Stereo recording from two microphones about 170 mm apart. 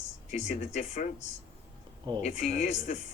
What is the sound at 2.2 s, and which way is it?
Speech, 40° left (ahead or behind).